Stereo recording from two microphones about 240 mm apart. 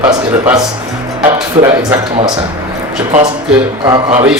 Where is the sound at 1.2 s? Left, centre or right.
Centre.